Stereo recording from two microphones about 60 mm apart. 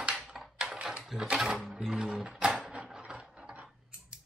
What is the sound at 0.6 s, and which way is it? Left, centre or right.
Typing, centre.